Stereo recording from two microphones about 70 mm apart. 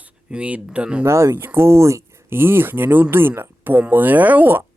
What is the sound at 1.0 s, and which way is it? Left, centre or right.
Speech, right.